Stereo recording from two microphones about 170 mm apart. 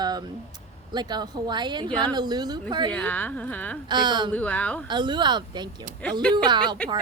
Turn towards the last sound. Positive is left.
turn(degrees=-30)  # may be behind; listen again after turning